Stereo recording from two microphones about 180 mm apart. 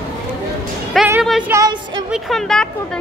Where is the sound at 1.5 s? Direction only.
25° right (ahead or behind).